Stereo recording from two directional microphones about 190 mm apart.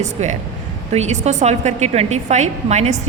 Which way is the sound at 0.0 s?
35° right (ahead or behind).